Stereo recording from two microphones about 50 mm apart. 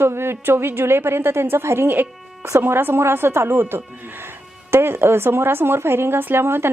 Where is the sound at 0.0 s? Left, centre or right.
Right.